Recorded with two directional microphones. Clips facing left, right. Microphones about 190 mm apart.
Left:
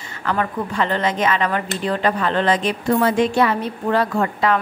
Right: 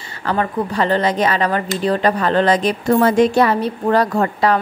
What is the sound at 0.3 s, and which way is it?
Speech, 35° right (ahead or behind).